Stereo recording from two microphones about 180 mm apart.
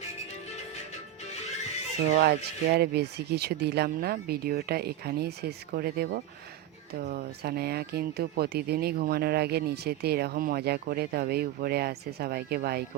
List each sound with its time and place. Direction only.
2.1 s speech: 65° right (ahead or behind)